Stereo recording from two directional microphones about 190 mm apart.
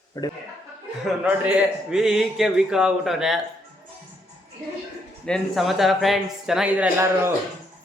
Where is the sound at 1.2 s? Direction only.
5° right (ahead or behind).